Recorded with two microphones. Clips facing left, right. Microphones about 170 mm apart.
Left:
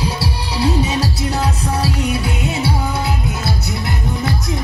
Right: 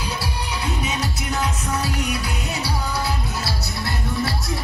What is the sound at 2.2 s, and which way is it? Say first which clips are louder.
Music: left 7 dB; 20° left (ahead or behind).